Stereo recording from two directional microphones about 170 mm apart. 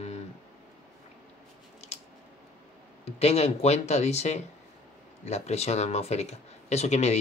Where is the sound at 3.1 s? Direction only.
40° left (ahead or behind).